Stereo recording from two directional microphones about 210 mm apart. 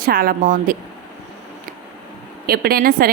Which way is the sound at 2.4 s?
45° right (ahead or behind).